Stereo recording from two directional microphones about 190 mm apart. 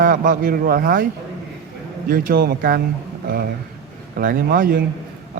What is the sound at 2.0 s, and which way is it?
Speech, 50° right (ahead or behind).